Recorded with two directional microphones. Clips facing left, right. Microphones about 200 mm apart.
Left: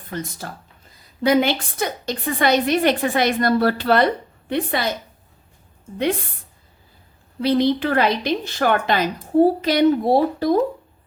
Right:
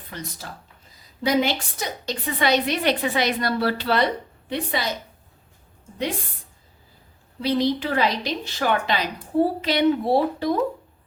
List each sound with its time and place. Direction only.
0.1 s a woman's voice: 50° left (ahead or behind)
7.4 s a woman's voice: 60° left (ahead or behind); by 10.6 s 40° left (ahead or behind)